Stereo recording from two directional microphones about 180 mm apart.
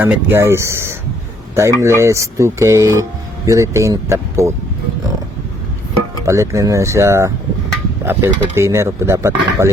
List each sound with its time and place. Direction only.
0.0 s speech: 10° right (ahead or behind)
6.2 s speech: 15° right (ahead or behind)